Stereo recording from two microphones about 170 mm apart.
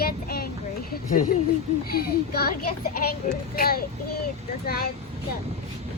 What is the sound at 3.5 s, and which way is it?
Speech, 60° left (ahead or behind).